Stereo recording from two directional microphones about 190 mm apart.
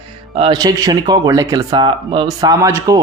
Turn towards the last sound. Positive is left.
turn(degrees=-15)  # may be behind; listen again after turning